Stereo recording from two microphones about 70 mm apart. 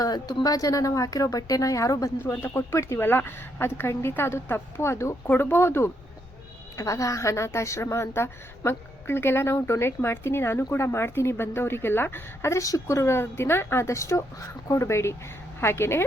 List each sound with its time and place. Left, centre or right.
0.0 s a woman's voice: left
2.2 s a woman's voice: left
2.5 s speech: left
3.0 s a woman's voice: left
5.2 s a woman's voice: left
6.7 s a woman's voice: left